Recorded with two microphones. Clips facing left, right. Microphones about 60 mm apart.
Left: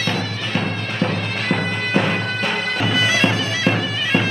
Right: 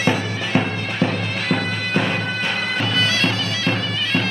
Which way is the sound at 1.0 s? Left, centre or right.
Centre.